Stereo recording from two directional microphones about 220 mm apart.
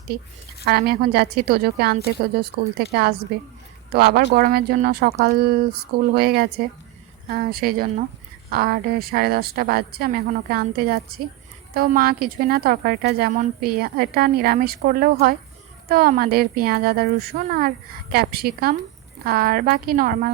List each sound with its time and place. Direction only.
0.6 s a woman's voice: 45° right (ahead or behind)